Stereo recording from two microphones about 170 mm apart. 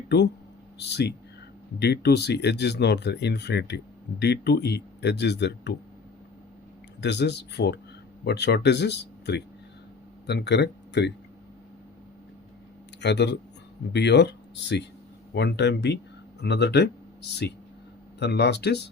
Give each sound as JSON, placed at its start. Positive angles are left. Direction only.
{"t": 0.8, "sound": "speech", "side_deg": 80}
{"t": 7.0, "sound": "speech", "side_deg": 85}
{"t": 13.0, "sound": "speech", "side_deg": 90}
{"t": 16.4, "sound": "speech", "side_deg": 80}
{"t": 18.2, "sound": "speech", "side_deg": 80}